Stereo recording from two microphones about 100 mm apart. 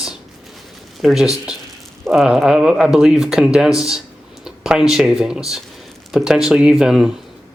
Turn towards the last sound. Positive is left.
turn(degrees=-5)  # may be behind; listen again after turning